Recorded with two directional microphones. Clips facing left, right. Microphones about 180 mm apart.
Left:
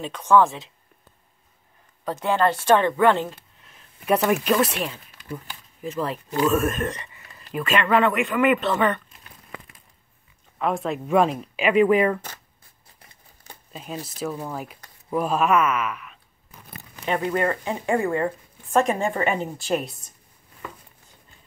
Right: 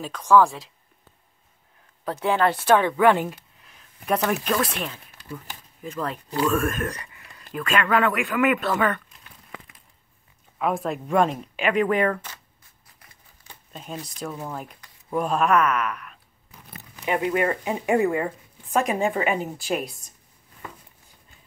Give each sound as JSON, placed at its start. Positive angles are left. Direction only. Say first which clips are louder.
{"t": 0.0, "sound": "speech", "louder": "even", "side_deg": 0}
{"t": 2.2, "sound": "speech", "louder": "left 1 dB", "side_deg": -10}
{"t": 3.6, "sound": "speech", "louder": "left 4 dB", "side_deg": 5}
{"t": 5.9, "sound": "speech", "louder": "left 3 dB", "side_deg": 5}
{"t": 10.6, "sound": "speech", "louder": "even", "side_deg": 0}
{"t": 13.0, "sound": "crumpling", "louder": "left 5 dB", "side_deg": 40}
{"t": 13.7, "sound": "speech", "louder": "left 2 dB", "side_deg": 5}
{"t": 17.0, "sound": "speech", "louder": "even", "side_deg": -10}